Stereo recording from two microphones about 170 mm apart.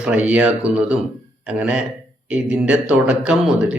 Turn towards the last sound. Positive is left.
turn(degrees=-5)  # may be behind; listen again after turning